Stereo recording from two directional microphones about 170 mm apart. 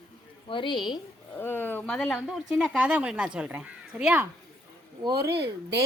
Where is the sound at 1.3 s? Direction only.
10° left (ahead or behind); by 4.2 s 5° right (ahead or behind).